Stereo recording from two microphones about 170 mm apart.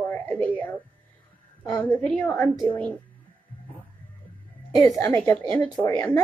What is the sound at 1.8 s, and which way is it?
A woman's voice, 10° left (ahead or behind).